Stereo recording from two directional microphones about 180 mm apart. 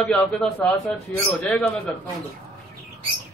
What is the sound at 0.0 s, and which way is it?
Speech, 5° left (ahead or behind).